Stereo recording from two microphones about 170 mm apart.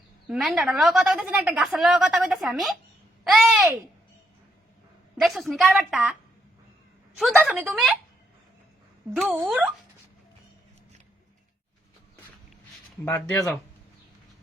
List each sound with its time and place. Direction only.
0.3 s a woman's voice: centre (ahead or behind)
5.2 s a woman's voice: centre (ahead or behind)
7.2 s a woman's voice: centre (ahead or behind)
9.3 s speech: 10° right (ahead or behind)
13.1 s speech: 15° left (ahead or behind)